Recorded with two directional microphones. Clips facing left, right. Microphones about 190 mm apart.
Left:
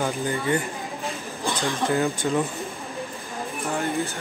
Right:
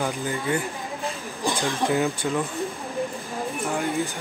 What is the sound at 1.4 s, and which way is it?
Speech, 15° right (ahead or behind).